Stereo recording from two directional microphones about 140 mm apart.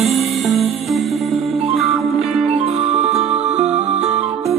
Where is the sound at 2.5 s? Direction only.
50° right (ahead or behind).